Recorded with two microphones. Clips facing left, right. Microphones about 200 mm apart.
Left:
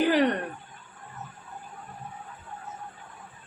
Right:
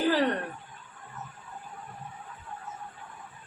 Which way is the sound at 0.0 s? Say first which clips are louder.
Left 3 dB; 20° left (ahead or behind).